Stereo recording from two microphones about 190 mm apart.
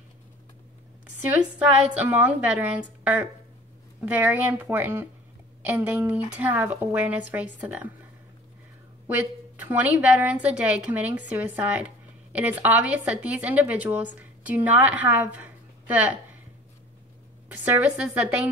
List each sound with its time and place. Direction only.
1.3 s a woman's voice: 5° right (ahead or behind)
3.0 s a sound: 5° right (ahead or behind)
4.0 s a woman's voice: 10° right (ahead or behind)
9.0 s a woman's voice: 10° right (ahead or behind)
17.5 s a woman's voice: 5° right (ahead or behind)